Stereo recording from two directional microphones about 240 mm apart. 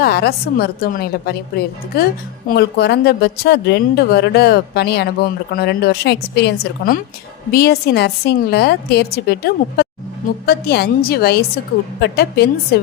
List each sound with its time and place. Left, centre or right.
0.0 s a woman's voice: left